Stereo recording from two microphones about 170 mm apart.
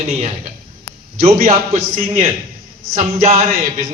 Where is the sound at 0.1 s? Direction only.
35° right (ahead or behind).